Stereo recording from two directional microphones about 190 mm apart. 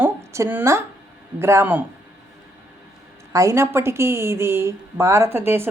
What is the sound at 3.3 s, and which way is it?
A woman's voice, 15° right (ahead or behind).